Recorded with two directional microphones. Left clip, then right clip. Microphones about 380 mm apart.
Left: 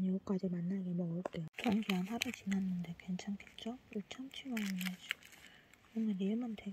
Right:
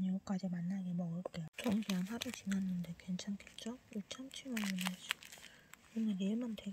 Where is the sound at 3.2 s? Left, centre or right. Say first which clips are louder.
Left 1 dB; centre.